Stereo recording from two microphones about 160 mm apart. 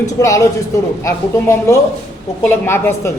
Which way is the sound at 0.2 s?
20° left (ahead or behind).